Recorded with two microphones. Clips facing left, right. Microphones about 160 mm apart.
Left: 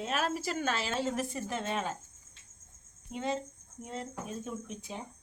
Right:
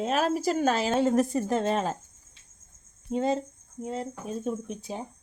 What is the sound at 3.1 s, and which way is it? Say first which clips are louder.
Speech: right 8 dB; 40° right (ahead or behind).